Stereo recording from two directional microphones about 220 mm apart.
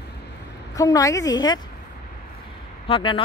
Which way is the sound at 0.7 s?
15° left (ahead or behind).